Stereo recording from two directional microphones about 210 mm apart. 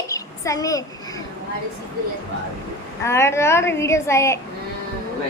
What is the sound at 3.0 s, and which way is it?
A woman's voice, 10° left (ahead or behind).